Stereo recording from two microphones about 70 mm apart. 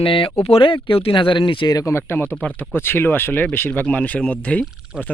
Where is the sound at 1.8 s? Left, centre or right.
Left.